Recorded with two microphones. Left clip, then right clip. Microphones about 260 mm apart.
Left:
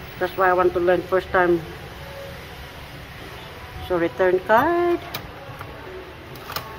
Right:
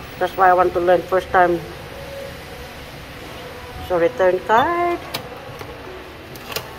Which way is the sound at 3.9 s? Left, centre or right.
Left.